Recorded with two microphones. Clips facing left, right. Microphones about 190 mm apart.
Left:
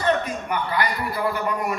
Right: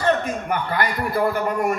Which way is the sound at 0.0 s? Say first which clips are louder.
Right 2 dB; 50° right (ahead or behind).